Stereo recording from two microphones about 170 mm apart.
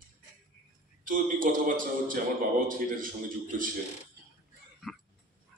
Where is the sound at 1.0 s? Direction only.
50° right (ahead or behind).